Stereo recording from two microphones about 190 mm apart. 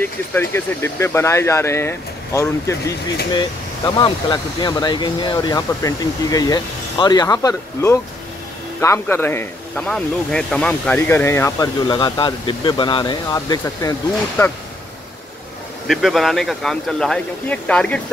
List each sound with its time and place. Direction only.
0.0 s speech: 10° left (ahead or behind)
15.9 s speech: centre (ahead or behind)